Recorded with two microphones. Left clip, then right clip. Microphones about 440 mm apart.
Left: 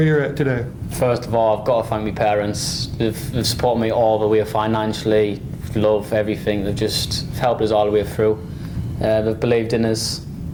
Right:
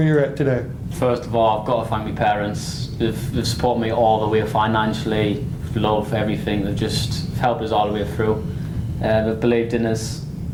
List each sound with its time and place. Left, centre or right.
0.0 s speech: centre
0.9 s speech: left